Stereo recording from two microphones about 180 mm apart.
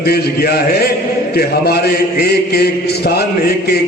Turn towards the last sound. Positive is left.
turn(degrees=60)  # may be behind; listen again after turning